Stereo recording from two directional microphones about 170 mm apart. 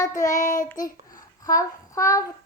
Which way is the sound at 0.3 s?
50° left (ahead or behind).